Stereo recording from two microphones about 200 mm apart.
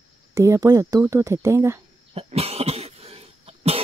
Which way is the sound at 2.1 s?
30° right (ahead or behind).